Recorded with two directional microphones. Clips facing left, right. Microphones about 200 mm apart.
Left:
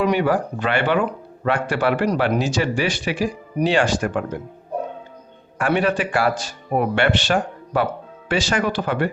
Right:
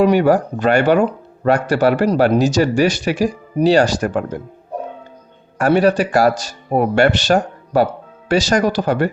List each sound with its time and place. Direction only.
0.0 s speech: 40° right (ahead or behind)
5.5 s speech: 40° right (ahead or behind)